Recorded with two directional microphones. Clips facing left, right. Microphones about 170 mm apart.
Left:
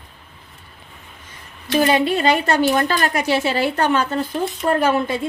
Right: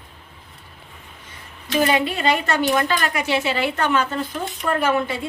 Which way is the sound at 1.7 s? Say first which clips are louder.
Left 3 dB; 30° left (ahead or behind).